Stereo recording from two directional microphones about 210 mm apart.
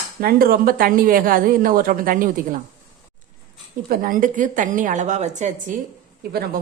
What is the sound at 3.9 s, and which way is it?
A woman's voice, 40° right (ahead or behind).